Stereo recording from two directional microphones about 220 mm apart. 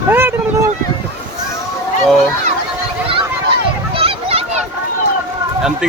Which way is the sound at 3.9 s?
25° right (ahead or behind).